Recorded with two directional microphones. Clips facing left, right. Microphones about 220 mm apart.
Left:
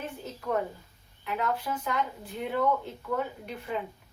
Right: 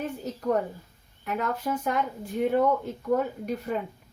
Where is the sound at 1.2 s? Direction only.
45° right (ahead or behind).